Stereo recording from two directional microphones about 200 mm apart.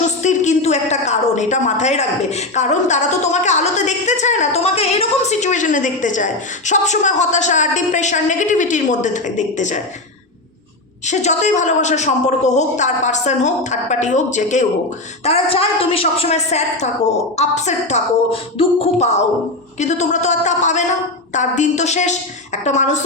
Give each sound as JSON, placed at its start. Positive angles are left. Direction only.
{"t": 0.2, "sound": "a woman's voice", "side_deg": 35}
{"t": 11.0, "sound": "a woman's voice", "side_deg": 35}